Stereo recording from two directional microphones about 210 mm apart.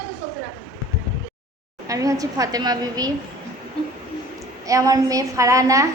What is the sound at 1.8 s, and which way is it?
A woman's voice, 15° right (ahead or behind).